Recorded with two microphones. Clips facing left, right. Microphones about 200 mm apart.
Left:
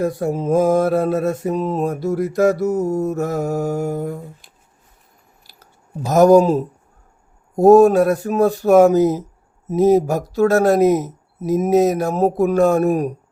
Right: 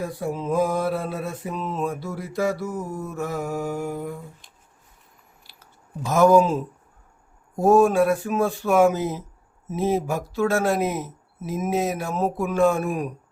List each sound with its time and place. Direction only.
0.0 s mantra: 45° left (ahead or behind)
5.4 s a sound: 40° left (ahead or behind)
6.1 s speech: 40° left (ahead or behind)